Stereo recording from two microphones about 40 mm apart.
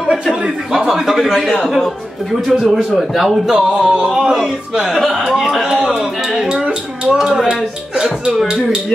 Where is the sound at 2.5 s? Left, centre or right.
Centre.